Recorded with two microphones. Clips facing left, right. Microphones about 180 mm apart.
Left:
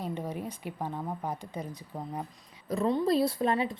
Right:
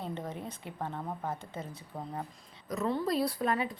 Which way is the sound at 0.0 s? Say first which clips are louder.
Left 3 dB; 10° left (ahead or behind).